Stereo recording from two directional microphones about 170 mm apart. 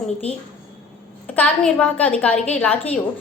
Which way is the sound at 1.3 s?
10° left (ahead or behind).